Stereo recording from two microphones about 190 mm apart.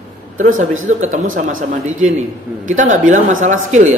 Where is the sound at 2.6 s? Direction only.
40° right (ahead or behind).